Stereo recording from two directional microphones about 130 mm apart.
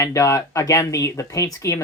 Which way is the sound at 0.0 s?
25° left (ahead or behind).